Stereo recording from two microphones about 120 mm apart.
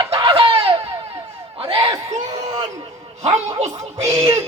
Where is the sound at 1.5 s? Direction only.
55° right (ahead or behind).